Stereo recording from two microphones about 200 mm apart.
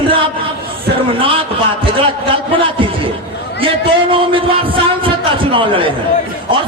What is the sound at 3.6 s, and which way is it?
A man's voice, 25° right (ahead or behind).